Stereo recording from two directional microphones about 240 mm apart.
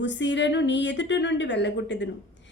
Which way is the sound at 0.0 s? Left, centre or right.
Left.